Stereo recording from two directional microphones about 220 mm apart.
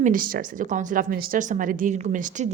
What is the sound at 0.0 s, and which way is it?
Speech, 40° right (ahead or behind).